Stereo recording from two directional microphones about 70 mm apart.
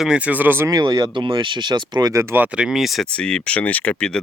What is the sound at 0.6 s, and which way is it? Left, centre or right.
Speech, right.